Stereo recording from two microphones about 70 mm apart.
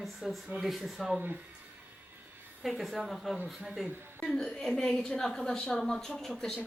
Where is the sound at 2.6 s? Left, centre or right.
Centre.